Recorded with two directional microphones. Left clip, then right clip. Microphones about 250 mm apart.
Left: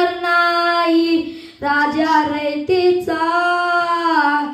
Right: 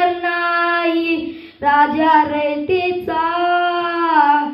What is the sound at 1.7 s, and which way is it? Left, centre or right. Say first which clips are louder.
Child singing: right 3 dB; left.